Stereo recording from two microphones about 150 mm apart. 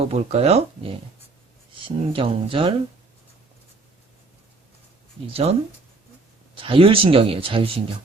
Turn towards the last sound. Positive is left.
turn(degrees=-40)  # may be behind; listen again after turning